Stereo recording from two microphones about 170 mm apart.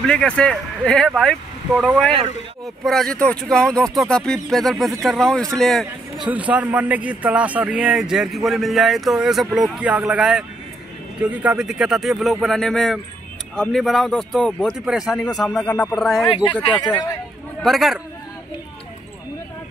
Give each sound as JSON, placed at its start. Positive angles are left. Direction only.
{"t": 0.0, "sound": "a man's voice", "side_deg": 5}
{"t": 6.5, "sound": "a man's voice", "side_deg": -10}
{"t": 16.6, "sound": "speech", "side_deg": 30}
{"t": 17.6, "sound": "a man's voice", "side_deg": 0}